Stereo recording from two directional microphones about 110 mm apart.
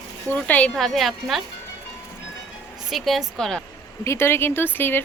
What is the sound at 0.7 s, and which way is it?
Speech, centre (ahead or behind).